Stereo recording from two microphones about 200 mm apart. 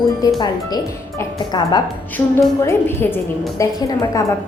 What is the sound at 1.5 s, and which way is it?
A woman's voice, 20° left (ahead or behind).